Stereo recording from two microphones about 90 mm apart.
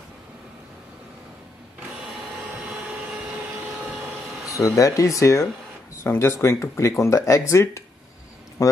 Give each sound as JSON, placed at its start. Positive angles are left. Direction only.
{"t": 4.5, "sound": "a man's voice", "side_deg": 35}